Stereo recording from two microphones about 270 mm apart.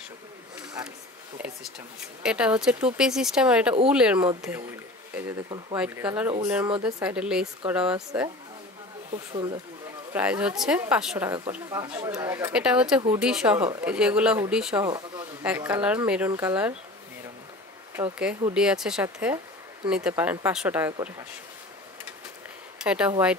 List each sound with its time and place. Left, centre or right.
1.4 s speech: centre
5.8 s speech: centre
9.1 s speech: centre
10.1 s speech: centre
14.9 s speech: centre
17.9 s speech: centre
22.8 s speech: centre